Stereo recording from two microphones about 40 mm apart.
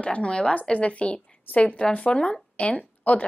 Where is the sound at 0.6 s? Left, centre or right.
Left.